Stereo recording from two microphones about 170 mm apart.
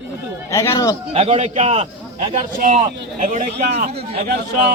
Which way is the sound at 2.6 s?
45° right (ahead or behind).